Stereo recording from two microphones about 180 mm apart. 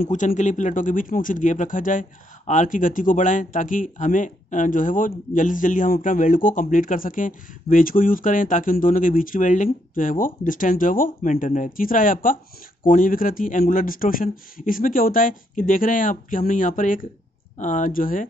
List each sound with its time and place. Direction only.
0.0 s speech: 45° left (ahead or behind)